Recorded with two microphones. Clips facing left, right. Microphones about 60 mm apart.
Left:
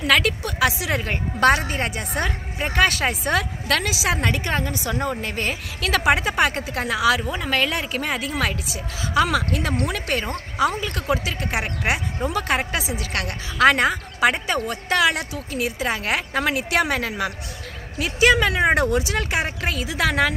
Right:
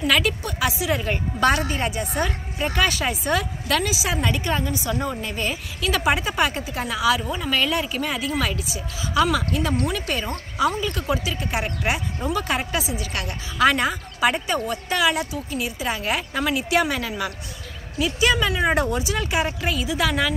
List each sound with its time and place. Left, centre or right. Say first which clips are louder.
0.0 s a woman's voice: left 2 dB; left
12.2 s a woman's voice: left 2 dB; left